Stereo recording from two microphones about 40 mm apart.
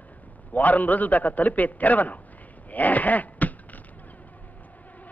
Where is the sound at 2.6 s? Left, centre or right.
Left.